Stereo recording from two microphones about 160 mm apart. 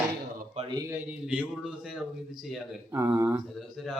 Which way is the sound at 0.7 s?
20° right (ahead or behind).